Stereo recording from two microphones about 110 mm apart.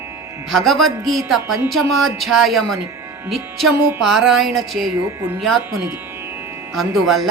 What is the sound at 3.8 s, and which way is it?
Speech, 20° right (ahead or behind).